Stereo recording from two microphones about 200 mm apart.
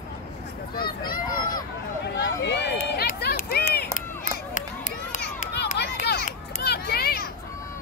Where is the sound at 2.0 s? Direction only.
60° left (ahead or behind); by 5.2 s 40° left (ahead or behind).